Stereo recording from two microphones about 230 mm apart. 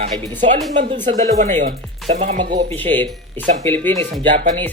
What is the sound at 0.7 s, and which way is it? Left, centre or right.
Speech, right.